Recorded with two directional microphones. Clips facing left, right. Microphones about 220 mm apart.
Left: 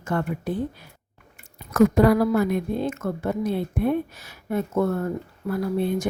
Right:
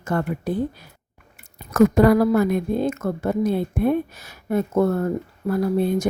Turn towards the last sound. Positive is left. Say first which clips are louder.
# right 4 dB
turn(degrees=-40)  # may be behind; listen again after turning